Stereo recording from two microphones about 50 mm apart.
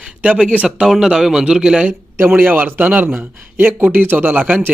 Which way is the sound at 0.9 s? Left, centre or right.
Centre.